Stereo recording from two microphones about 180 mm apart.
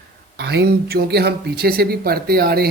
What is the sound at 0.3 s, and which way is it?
Speech, 65° right (ahead or behind).